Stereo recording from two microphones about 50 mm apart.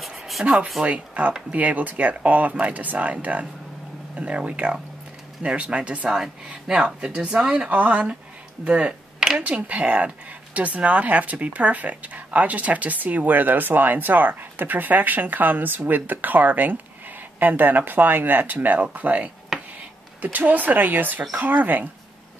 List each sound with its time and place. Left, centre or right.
0.3 s a sound: centre
0.8 s speech: right
6.0 s a woman's voice: centre; by 19.3 s right
20.3 s speech: right